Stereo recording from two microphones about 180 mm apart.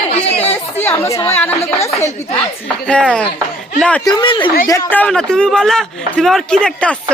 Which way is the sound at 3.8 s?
5° left (ahead or behind).